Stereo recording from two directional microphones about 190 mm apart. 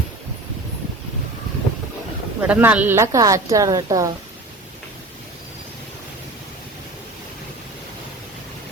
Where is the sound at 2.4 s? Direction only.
10° right (ahead or behind).